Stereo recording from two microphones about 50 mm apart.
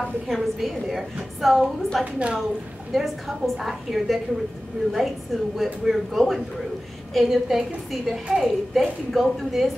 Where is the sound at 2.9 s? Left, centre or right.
Centre.